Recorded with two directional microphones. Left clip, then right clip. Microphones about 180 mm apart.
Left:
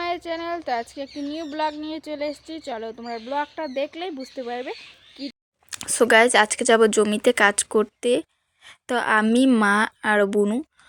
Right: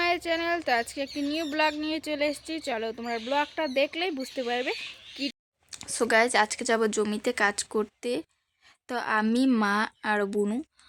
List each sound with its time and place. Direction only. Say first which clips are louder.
0.0 s speech: right 1 dB; centre (ahead or behind)
5.7 s speech: left 7 dB; 25° left (ahead or behind)
8.6 s a sound: left 8 dB; 25° left (ahead or behind)
9.2 s speech: left 7 dB; 15° left (ahead or behind)